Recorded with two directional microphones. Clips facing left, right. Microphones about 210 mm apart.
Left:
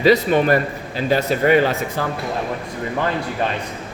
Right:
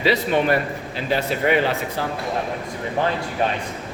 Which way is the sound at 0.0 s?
45° left (ahead or behind).